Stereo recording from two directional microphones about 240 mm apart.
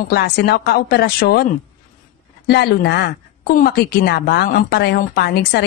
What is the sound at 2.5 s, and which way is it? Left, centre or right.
A woman's voice, left.